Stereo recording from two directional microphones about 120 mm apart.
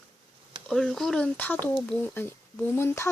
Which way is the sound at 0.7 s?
5° left (ahead or behind).